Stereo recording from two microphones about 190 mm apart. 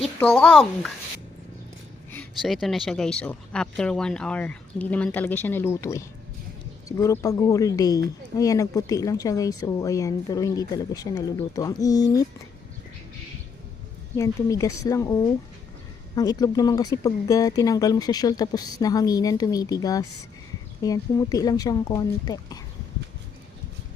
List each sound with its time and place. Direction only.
0.0 s speech: 5° left (ahead or behind)
2.4 s speech: centre (ahead or behind); by 12.2 s 20° left (ahead or behind)
14.2 s speech: 15° left (ahead or behind)